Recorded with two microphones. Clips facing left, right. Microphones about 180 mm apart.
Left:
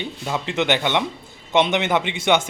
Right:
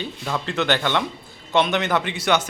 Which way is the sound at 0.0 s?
15° left (ahead or behind).